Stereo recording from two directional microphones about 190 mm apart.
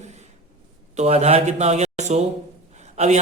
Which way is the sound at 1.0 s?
35° right (ahead or behind).